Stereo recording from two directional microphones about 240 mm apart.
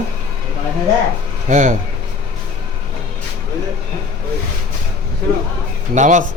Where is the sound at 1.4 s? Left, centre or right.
Right.